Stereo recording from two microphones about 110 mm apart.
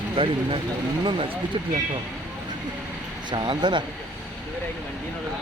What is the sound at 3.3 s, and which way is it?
Speech, 45° right (ahead or behind).